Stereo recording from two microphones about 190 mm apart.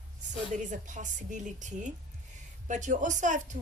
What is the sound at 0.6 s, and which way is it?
A woman's voice, 40° right (ahead or behind).